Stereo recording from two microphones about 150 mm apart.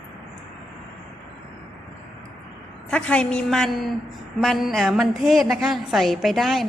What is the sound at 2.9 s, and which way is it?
A woman's voice, 5° left (ahead or behind).